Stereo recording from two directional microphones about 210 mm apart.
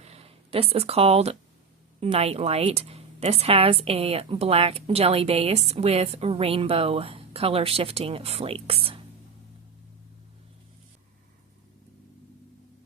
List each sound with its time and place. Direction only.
0.0 s a woman's voice: 30° right (ahead or behind)